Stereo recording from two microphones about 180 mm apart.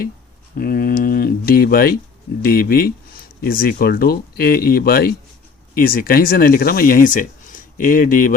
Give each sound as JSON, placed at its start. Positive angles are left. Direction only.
{"t": 0.5, "sound": "speech", "side_deg": 55}